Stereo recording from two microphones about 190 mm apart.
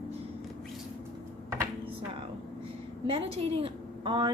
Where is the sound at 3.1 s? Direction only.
30° right (ahead or behind).